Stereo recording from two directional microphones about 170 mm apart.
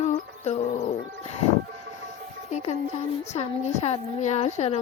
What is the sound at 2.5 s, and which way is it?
Speech, 40° left (ahead or behind).